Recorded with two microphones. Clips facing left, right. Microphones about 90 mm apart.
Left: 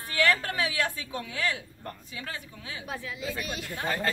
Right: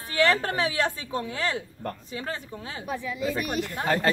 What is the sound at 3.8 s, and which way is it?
Speech, 65° right (ahead or behind).